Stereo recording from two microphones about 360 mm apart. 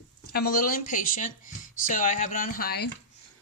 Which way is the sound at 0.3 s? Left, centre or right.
Left.